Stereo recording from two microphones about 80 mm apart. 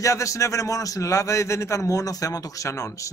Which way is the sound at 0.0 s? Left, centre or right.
Left.